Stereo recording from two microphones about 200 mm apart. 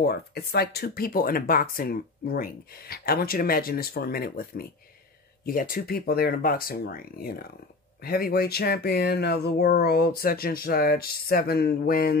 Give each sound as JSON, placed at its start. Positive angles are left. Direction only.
{"t": 0.0, "sound": "speech", "side_deg": 50}